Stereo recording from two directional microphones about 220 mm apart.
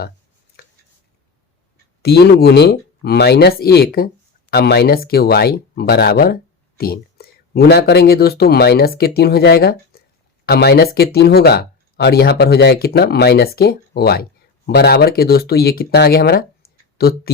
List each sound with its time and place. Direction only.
2.0 s speech: 45° left (ahead or behind)